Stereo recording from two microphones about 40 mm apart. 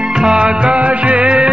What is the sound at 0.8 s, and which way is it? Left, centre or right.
Music, right.